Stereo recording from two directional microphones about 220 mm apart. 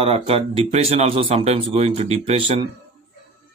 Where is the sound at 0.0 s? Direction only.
25° right (ahead or behind).